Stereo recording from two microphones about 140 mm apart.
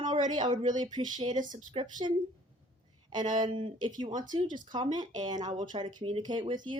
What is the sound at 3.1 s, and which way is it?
A woman's voice, 30° right (ahead or behind).